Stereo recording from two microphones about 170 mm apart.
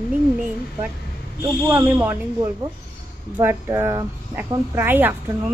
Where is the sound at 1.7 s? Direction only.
10° right (ahead or behind).